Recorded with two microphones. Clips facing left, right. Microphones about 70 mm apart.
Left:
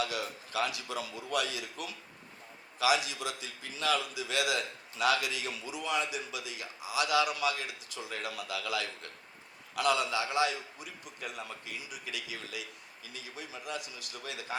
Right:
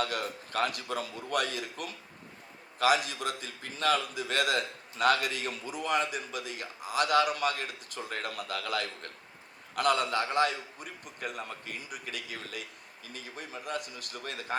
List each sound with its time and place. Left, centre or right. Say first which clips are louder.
0.0 s a man's voice: right 2 dB; right